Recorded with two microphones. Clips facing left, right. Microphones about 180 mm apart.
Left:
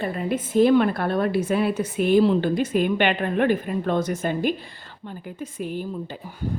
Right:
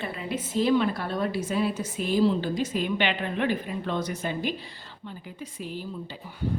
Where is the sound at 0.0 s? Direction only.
45° left (ahead or behind).